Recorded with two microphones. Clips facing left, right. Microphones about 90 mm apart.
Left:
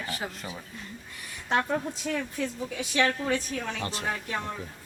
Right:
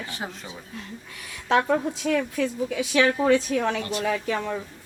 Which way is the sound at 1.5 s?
80° right.